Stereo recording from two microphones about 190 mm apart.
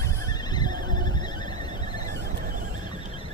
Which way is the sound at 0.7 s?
45° right (ahead or behind).